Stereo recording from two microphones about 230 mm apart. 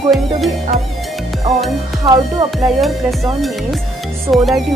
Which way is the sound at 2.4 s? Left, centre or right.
Centre.